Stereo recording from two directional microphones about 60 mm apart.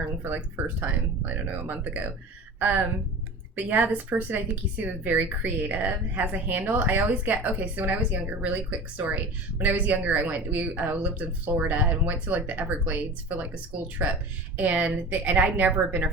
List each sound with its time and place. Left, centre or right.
0.2 s a woman's voice: right